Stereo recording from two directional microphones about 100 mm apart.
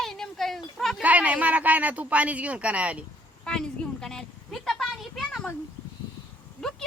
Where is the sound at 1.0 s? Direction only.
15° right (ahead or behind).